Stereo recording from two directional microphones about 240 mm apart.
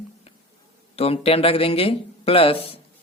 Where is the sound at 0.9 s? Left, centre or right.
Left.